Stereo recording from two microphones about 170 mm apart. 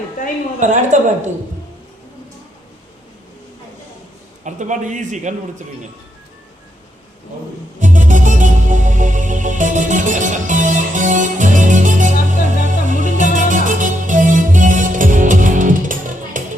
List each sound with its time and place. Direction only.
0.6 s a man's voice: 45° right (ahead or behind)
4.4 s a man's voice: 45° right (ahead or behind)
7.8 s music: 50° right (ahead or behind)